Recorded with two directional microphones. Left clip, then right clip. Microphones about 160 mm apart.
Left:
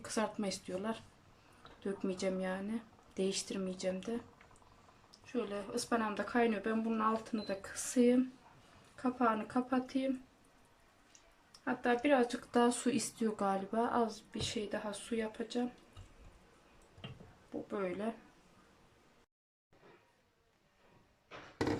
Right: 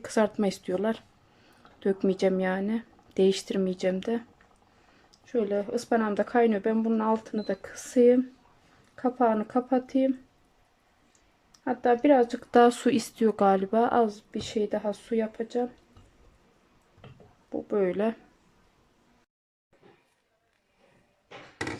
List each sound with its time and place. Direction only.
0.0 s speech: 50° right (ahead or behind)
5.1 s speech: 45° right (ahead or behind)
11.6 s speech: 45° right (ahead or behind)
17.7 s speech: 50° right (ahead or behind)